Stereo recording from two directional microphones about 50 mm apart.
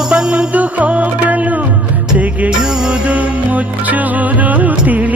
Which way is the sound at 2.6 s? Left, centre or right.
Centre.